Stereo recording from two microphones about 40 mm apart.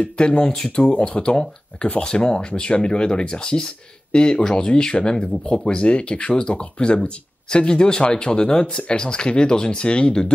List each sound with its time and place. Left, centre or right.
0.2 s speech: left
0.5 s speech: centre
0.9 s speech: left